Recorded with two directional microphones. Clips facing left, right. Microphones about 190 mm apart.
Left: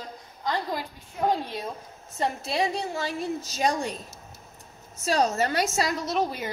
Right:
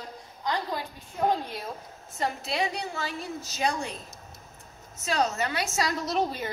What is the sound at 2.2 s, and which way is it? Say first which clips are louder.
A woman's voice: left 3 dB; 30° left (ahead or behind).